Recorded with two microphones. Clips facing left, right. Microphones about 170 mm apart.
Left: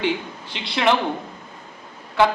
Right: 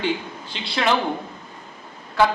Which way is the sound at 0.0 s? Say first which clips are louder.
Left 1 dB; 65° left (ahead or behind).